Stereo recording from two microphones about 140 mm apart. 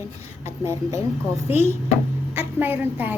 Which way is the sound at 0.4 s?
20° right (ahead or behind).